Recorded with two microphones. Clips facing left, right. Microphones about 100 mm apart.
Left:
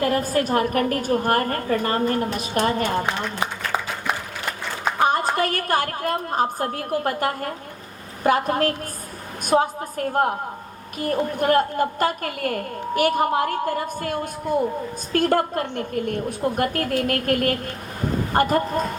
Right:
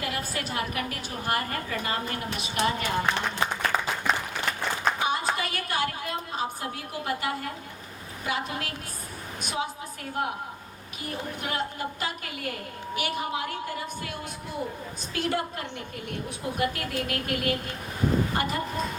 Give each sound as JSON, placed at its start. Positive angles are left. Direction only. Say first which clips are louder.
{"t": 0.0, "sound": "a woman's voice", "louder": "left 11 dB", "side_deg": 45}
{"t": 3.4, "sound": "a sound", "louder": "right 1 dB", "side_deg": 15}
{"t": 4.9, "sound": "a woman's voice", "louder": "left 8 dB", "side_deg": 50}